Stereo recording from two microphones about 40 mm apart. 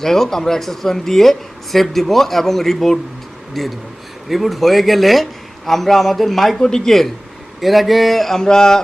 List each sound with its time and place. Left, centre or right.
0.0 s a man's voice: centre
6.6 s a man's voice: centre